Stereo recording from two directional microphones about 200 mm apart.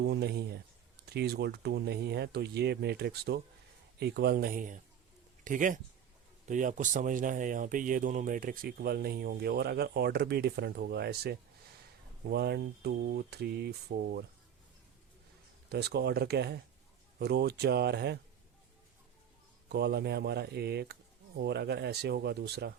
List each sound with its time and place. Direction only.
0.0 s speech: 55° right (ahead or behind)
15.7 s speech: 55° right (ahead or behind)
19.6 s speech: 55° right (ahead or behind)